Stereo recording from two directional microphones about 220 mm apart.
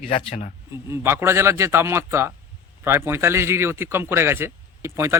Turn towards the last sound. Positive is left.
turn(degrees=-10)  # may be behind; listen again after turning